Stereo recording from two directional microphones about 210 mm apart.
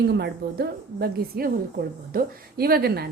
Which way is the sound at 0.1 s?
50° right (ahead or behind).